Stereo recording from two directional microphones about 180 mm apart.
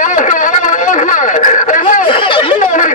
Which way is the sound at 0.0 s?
45° left (ahead or behind).